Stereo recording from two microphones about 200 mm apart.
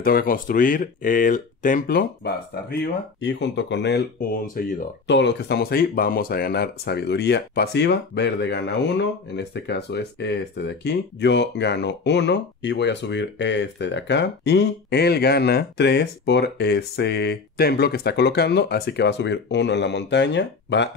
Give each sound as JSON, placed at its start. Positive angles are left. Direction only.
{"t": 0.0, "sound": "speech", "side_deg": 45}
{"t": 3.2, "sound": "speech", "side_deg": 65}